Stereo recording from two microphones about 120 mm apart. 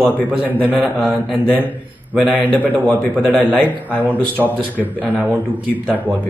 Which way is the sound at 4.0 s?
15° right (ahead or behind).